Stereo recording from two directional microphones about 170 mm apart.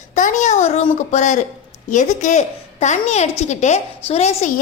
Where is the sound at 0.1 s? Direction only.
50° left (ahead or behind).